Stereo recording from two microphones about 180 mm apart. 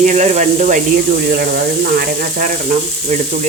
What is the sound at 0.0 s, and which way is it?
Speech, 40° right (ahead or behind).